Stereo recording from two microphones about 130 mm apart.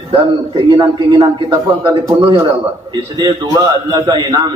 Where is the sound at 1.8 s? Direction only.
40° right (ahead or behind).